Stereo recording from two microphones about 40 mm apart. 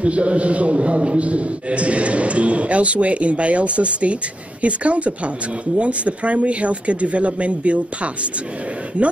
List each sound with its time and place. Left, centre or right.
0.0 s a man's voice: right